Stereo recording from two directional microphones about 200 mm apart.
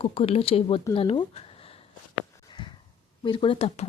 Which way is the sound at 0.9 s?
30° left (ahead or behind).